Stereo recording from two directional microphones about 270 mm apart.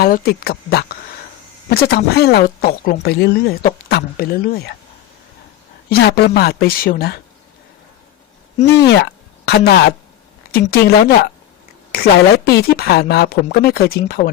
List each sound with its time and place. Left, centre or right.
0.0 s speech: left
5.9 s speech: left
8.9 s speech: left
11.9 s a sound: left
12.5 s speech: left